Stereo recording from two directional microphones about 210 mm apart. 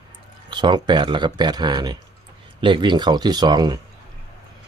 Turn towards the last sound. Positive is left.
turn(degrees=-20)  # may be behind; listen again after turning